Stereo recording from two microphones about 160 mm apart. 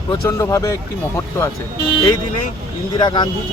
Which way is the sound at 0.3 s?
15° left (ahead or behind).